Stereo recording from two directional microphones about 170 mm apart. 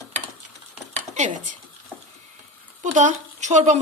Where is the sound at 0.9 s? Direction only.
45° right (ahead or behind).